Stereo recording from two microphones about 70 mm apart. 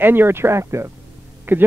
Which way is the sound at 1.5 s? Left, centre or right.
Right.